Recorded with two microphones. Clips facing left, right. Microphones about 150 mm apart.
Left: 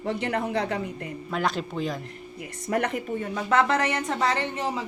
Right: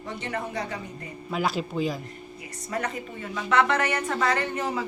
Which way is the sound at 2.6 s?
60° left (ahead or behind).